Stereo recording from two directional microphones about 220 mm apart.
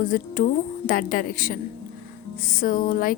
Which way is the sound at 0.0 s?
40° left (ahead or behind).